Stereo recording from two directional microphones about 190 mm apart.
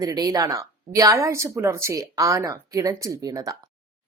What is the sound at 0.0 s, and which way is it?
Speech, 20° right (ahead or behind).